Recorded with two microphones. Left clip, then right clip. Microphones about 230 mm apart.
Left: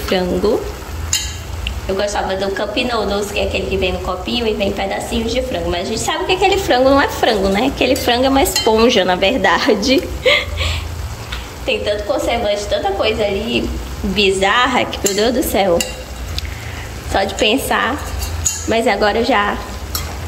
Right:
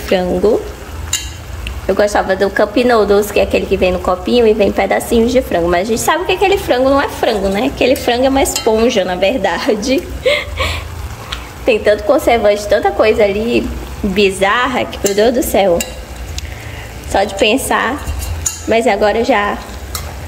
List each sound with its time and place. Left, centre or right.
0.1 s a woman's voice: centre
2.0 s a woman's voice: right; by 10.4 s centre
11.6 s a woman's voice: centre
17.1 s a woman's voice: centre